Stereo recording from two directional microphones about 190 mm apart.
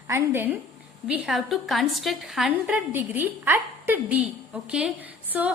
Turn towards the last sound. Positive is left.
turn(degrees=-10)  # may be behind; listen again after turning